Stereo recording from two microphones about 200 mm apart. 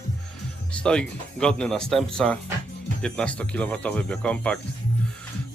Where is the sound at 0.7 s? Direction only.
5° left (ahead or behind).